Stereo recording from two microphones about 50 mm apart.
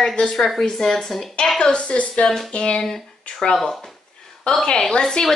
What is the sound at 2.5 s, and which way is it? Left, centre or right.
A woman's voice, centre.